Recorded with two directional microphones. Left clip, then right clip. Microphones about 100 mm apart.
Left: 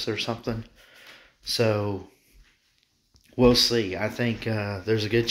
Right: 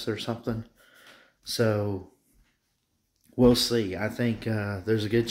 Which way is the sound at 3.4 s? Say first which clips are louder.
Left 2 dB; 50° right (ahead or behind).